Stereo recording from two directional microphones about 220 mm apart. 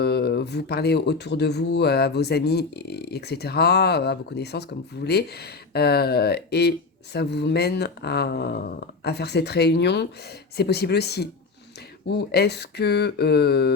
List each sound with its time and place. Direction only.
0.0 s speech: 45° left (ahead or behind)